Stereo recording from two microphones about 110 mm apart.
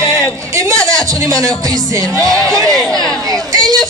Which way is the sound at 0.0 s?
40° left (ahead or behind).